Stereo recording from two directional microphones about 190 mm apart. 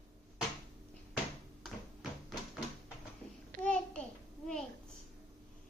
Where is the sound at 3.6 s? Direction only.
5° left (ahead or behind).